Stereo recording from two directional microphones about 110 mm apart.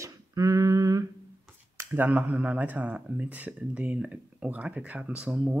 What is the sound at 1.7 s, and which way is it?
Speech, 15° right (ahead or behind).